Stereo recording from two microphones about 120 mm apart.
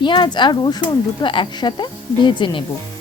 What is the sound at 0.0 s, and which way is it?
Speech, 40° left (ahead or behind).